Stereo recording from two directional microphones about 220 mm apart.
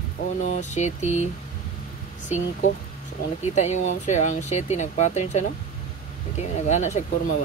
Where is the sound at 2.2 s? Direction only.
35° left (ahead or behind).